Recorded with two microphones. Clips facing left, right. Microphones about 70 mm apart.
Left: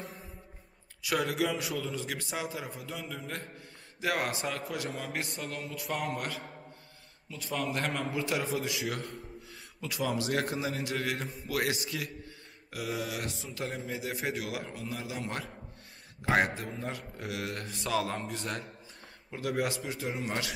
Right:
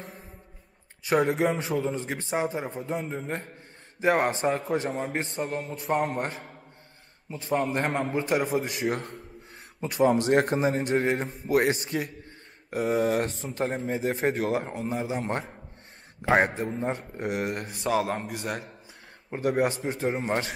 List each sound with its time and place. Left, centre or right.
1.0 s a man's voice: right; by 18.7 s centre
19.3 s a man's voice: right